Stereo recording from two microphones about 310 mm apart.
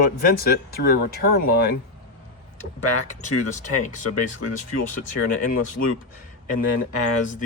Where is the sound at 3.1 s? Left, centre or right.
Left.